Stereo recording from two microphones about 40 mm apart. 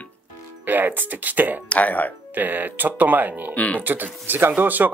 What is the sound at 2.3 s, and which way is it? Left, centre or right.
Speech, right.